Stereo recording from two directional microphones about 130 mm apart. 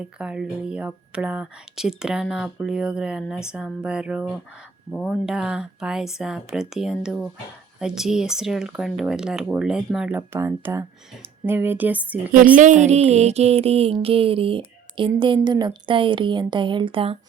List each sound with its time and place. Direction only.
0.0 s speech: 10° right (ahead or behind)
10.2 s speech: 15° right (ahead or behind)
12.5 s music: 75° right (ahead or behind); by 15.4 s 40° right (ahead or behind)
15.4 s speech: 35° right (ahead or behind)